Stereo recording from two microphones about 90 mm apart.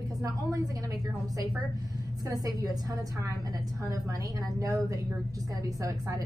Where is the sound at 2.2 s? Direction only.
40° right (ahead or behind).